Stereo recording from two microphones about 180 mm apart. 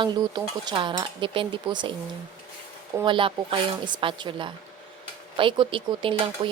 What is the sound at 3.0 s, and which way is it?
Speech, 30° right (ahead or behind).